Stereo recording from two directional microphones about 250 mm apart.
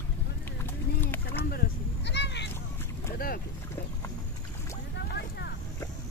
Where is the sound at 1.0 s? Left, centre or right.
Centre.